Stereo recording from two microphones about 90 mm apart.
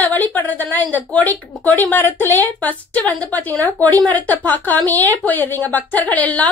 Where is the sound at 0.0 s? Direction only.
20° left (ahead or behind).